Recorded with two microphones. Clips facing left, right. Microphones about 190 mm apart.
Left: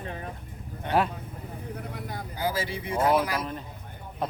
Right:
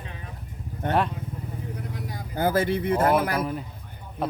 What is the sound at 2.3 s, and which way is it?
Speech, 55° right (ahead or behind).